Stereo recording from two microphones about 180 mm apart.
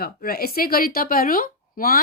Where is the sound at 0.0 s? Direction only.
55° left (ahead or behind).